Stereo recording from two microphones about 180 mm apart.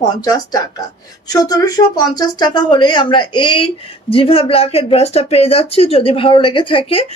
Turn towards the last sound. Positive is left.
turn(degrees=30)  # may be behind; listen again after turning